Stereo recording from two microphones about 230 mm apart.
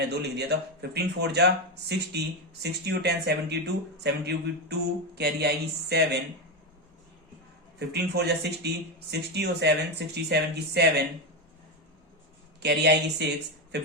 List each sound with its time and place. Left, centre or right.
0.1 s speech: right
7.8 s speech: right
12.6 s speech: right